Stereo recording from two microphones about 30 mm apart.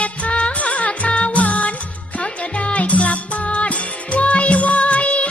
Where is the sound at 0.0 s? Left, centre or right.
Left.